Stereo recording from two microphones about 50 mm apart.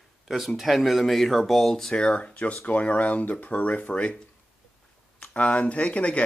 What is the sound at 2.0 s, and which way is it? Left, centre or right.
Speech, centre.